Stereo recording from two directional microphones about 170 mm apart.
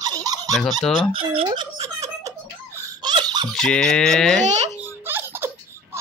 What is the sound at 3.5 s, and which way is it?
Speech, centre (ahead or behind).